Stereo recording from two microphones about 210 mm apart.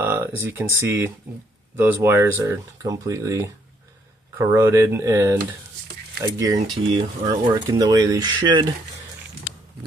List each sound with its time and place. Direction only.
0.0 s speech: 10° right (ahead or behind)